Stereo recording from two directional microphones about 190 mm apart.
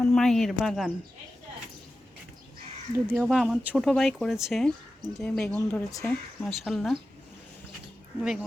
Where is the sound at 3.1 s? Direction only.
Centre (ahead or behind).